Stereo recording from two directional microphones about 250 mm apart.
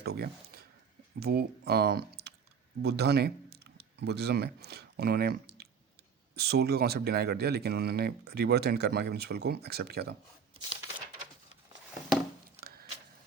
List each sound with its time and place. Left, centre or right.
0.0 s a sound: right
1.2 s speech: right
12.5 s scissors: right